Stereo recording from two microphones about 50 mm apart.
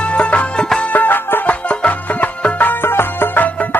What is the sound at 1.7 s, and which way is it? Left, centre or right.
Music, left.